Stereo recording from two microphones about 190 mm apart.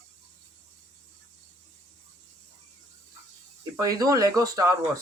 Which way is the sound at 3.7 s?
20° right (ahead or behind).